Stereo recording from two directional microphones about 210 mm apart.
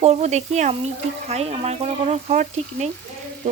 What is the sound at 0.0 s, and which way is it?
Speech, 30° right (ahead or behind).